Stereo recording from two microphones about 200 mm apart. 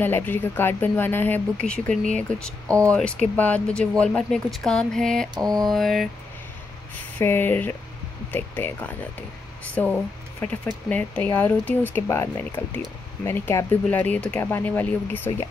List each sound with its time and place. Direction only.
0.0 s speech: 10° left (ahead or behind)
5.3 s mantra: 20° right (ahead or behind)
5.7 s speech: centre (ahead or behind)
7.2 s speech: 10° left (ahead or behind)